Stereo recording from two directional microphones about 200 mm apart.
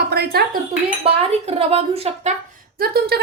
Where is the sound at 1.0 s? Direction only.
30° right (ahead or behind).